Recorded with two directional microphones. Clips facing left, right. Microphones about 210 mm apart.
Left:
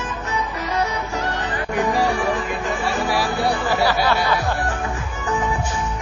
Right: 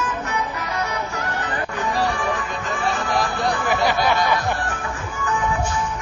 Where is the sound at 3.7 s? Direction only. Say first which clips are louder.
Right 1 dB; 15° right (ahead or behind).